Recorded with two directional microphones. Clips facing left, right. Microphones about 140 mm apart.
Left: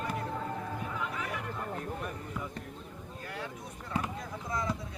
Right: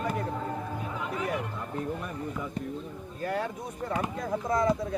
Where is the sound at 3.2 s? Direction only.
50° right (ahead or behind).